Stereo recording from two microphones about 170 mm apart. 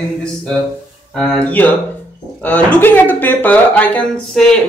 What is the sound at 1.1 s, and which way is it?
Speech, 5° left (ahead or behind).